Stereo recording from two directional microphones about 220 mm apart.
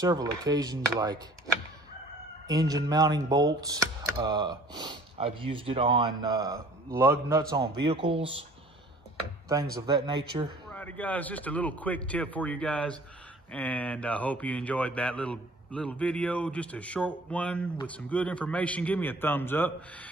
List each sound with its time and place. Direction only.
0.0 s speech: 15° right (ahead or behind)
2.7 s speech: 15° right (ahead or behind)
9.5 s speech: 20° right (ahead or behind)
10.7 s a man's voice: 5° left (ahead or behind)